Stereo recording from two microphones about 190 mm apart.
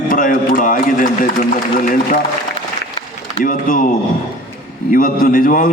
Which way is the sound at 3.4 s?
45° left (ahead or behind).